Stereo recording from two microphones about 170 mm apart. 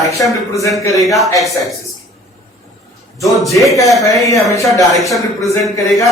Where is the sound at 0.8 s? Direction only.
20° left (ahead or behind).